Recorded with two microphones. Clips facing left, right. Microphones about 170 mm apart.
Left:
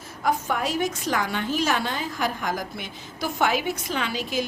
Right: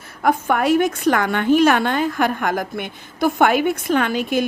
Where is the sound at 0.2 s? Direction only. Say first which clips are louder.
Right 7 dB; 60° right (ahead or behind).